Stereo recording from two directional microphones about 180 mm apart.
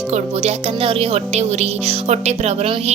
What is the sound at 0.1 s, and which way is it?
Speech, 35° right (ahead or behind).